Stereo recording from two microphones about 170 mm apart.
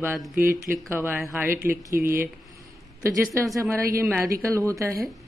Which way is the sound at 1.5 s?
15° right (ahead or behind).